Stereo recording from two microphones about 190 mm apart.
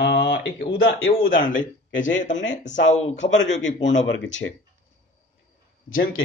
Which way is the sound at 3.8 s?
75° left (ahead or behind).